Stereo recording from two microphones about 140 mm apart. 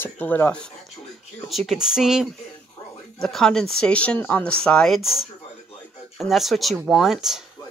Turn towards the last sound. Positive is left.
turn(degrees=0)  # may be behind; listen again after turning